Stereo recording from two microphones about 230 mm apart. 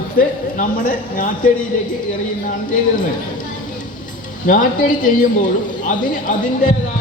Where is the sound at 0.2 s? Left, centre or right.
Left.